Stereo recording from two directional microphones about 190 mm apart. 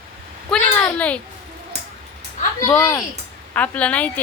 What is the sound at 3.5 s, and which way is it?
Speech, 5° left (ahead or behind).